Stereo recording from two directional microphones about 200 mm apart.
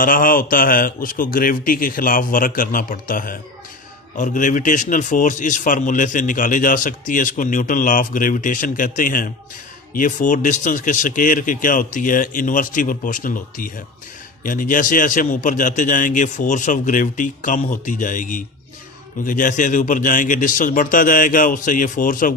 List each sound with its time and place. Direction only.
0.0 s a man's voice: 45° left (ahead or behind)